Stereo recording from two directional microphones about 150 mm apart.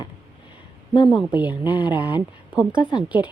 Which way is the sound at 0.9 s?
30° left (ahead or behind).